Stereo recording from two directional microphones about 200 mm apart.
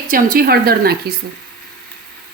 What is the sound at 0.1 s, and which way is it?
A woman's voice, 45° right (ahead or behind).